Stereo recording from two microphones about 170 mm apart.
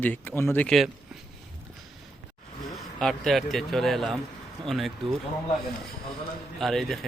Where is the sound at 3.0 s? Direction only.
Centre (ahead or behind).